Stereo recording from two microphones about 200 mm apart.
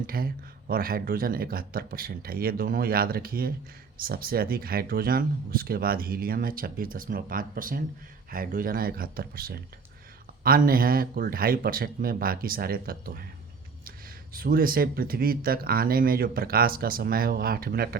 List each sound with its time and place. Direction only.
0.1 s speech: 45° right (ahead or behind)
14.3 s speech: 45° right (ahead or behind)